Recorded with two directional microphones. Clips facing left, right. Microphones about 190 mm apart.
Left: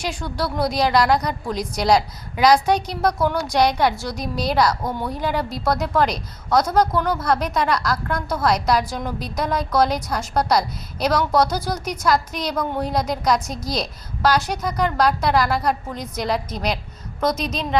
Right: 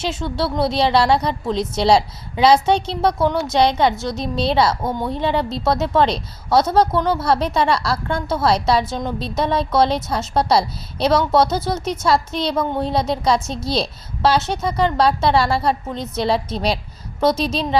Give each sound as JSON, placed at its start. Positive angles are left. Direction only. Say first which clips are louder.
{"t": 0.0, "sound": "a woman's voice", "louder": "right 3 dB", "side_deg": -25}